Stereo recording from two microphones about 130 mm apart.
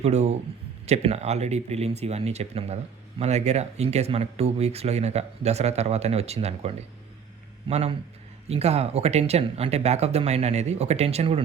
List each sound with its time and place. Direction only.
0.0 s a man's voice: 55° right (ahead or behind)